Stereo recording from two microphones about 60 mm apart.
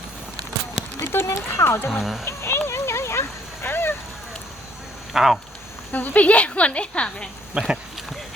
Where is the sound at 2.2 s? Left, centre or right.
Left.